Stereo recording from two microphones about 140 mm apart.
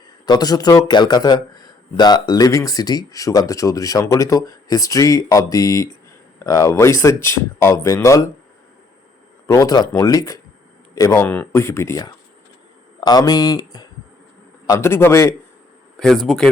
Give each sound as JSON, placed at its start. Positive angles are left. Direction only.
{"t": 0.3, "sound": "a man's voice", "side_deg": 30}
{"t": 9.5, "sound": "a man's voice", "side_deg": 25}
{"t": 16.0, "sound": "speech", "side_deg": 5}